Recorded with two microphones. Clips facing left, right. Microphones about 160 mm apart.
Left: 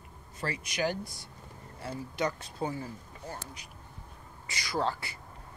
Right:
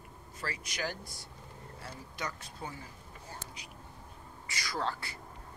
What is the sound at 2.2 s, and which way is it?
Speech, 30° left (ahead or behind).